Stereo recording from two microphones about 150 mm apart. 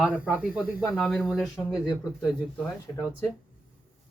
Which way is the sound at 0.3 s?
10° right (ahead or behind).